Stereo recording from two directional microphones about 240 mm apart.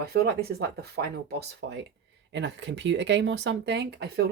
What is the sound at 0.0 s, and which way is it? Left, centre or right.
Speech, right.